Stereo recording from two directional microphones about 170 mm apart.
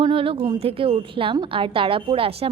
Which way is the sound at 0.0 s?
30° right (ahead or behind).